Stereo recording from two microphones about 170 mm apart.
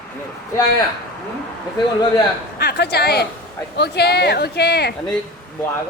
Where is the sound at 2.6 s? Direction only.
70° left (ahead or behind).